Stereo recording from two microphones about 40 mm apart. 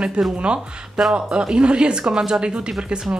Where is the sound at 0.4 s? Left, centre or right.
Right.